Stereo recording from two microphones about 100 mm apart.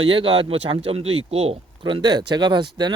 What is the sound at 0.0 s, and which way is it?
Speech, 60° right (ahead or behind).